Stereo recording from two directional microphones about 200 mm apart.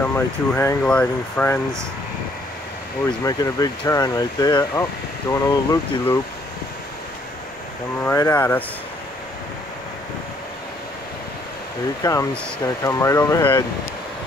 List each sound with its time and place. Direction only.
0.1 s speech: 10° left (ahead or behind)
3.3 s speech: 20° left (ahead or behind)
8.0 s speech: 10° left (ahead or behind)
12.0 s speech: 15° left (ahead or behind)